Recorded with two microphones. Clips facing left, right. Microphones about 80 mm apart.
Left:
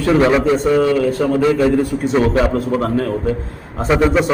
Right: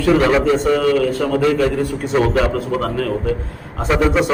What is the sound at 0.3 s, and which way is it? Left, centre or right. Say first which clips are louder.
Speech: left 1 dB; centre.